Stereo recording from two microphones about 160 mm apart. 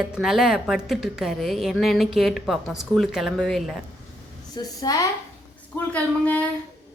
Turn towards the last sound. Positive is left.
turn(degrees=10)  # may be behind; listen again after turning